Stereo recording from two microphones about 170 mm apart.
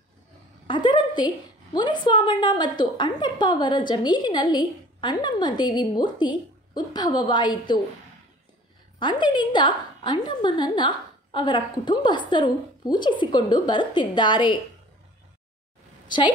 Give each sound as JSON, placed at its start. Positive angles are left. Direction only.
{"t": 0.7, "sound": "a woman's voice", "side_deg": 25}
{"t": 9.0, "sound": "a woman's voice", "side_deg": 25}